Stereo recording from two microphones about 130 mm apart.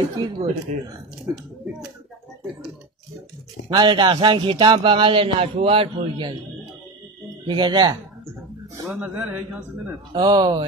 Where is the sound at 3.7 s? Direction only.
40° right (ahead or behind).